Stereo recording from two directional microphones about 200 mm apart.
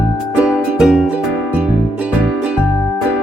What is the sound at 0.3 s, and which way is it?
Music, 5° right (ahead or behind).